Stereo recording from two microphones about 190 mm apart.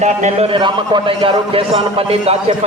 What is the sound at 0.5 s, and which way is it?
A man's voice, 25° right (ahead or behind).